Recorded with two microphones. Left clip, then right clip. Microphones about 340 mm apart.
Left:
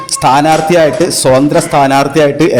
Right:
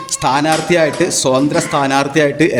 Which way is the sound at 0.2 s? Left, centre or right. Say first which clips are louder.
Left 7 dB; right.